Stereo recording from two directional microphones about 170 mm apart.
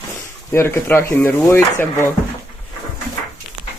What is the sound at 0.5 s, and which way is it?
Speech, 15° left (ahead or behind).